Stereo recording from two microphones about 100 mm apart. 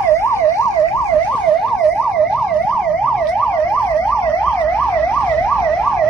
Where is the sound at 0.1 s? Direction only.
30° left (ahead or behind).